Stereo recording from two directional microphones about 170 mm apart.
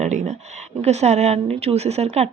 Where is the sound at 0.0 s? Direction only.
45° right (ahead or behind).